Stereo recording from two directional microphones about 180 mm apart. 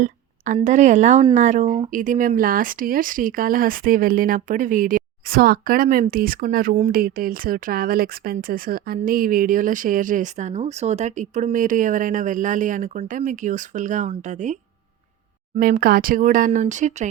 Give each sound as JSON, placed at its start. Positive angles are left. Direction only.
{"t": 0.0, "sound": "a woman's voice", "side_deg": -45}
{"t": 15.5, "sound": "speech", "side_deg": -50}